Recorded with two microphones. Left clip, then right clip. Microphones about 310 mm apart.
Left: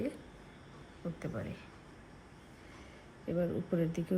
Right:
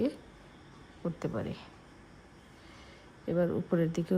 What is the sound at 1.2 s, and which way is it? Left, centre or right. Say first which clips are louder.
Speech: right 6 dB; centre.